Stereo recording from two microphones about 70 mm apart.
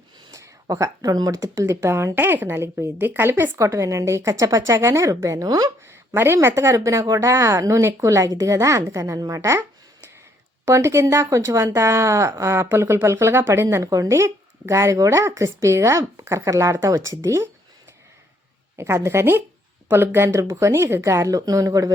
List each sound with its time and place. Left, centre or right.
0.8 s speech: right
2.1 s speech: right
5.8 s speech: right
6.6 s speech: right
10.7 s speech: right
18.8 s a woman's voice: right